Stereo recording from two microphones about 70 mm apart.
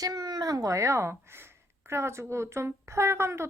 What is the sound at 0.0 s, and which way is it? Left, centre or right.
A woman's voice, right.